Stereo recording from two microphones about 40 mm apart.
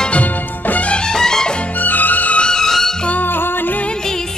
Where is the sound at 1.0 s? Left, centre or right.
Centre.